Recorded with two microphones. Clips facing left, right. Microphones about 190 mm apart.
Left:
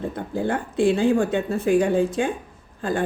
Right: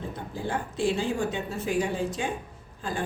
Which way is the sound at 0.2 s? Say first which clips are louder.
Left 7 dB; 55° left (ahead or behind).